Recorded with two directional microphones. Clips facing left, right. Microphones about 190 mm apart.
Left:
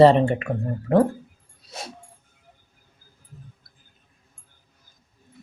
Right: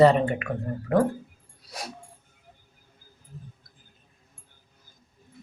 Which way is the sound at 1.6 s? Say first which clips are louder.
Left 1 dB; 25° left (ahead or behind).